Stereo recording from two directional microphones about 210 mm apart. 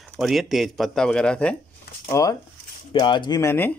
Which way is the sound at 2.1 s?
15° left (ahead or behind).